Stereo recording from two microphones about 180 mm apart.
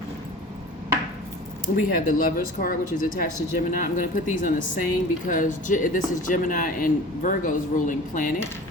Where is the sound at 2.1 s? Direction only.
55° left (ahead or behind).